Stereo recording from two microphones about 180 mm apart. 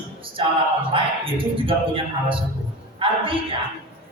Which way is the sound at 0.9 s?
30° right (ahead or behind).